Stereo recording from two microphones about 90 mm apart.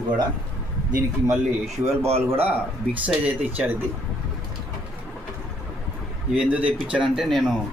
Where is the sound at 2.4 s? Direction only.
20° right (ahead or behind).